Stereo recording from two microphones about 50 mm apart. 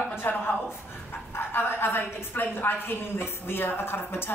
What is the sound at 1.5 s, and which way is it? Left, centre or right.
A woman's voice, left.